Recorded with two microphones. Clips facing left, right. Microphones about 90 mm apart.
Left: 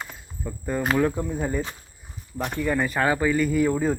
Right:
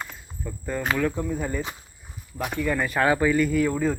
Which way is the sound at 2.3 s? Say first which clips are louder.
Even; 5° right (ahead or behind).